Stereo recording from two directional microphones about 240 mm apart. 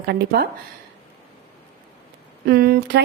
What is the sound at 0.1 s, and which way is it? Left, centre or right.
Speech, right.